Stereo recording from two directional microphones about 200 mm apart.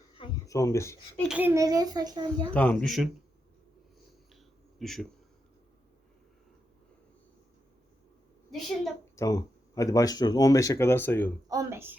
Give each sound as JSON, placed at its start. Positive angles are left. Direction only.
{"t": 0.2, "sound": "speech", "side_deg": 15}
{"t": 1.2, "sound": "a child's voice", "side_deg": -5}
{"t": 2.5, "sound": "speech", "side_deg": 5}
{"t": 4.8, "sound": "a man's voice", "side_deg": 0}
{"t": 8.4, "sound": "a woman's voice", "side_deg": 0}
{"t": 9.1, "sound": "speech", "side_deg": 15}
{"t": 11.4, "sound": "a child's voice", "side_deg": -15}